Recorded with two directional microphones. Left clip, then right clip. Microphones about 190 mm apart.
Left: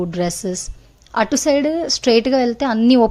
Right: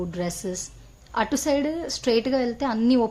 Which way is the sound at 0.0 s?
40° left (ahead or behind).